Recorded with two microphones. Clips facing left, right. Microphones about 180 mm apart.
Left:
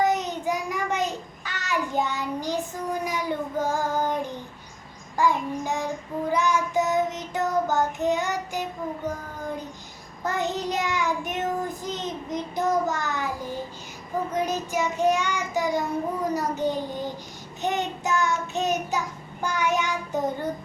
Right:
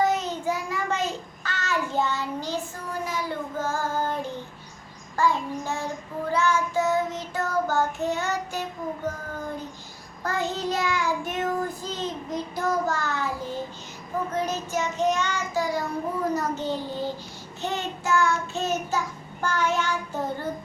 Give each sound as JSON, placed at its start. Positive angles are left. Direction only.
{"t": 0.0, "sound": "child singing", "side_deg": 15}
{"t": 10.2, "sound": "child singing", "side_deg": 20}
{"t": 14.3, "sound": "child singing", "side_deg": 15}